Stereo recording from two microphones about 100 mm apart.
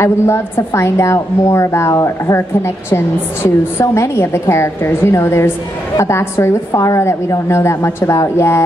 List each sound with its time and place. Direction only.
0.0 s speech: 25° left (ahead or behind)